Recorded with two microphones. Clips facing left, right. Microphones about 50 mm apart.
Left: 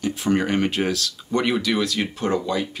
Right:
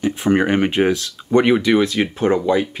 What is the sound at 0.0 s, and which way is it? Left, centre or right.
Speech, right.